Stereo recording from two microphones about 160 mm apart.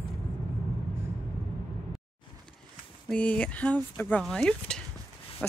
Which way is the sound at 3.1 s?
10° left (ahead or behind).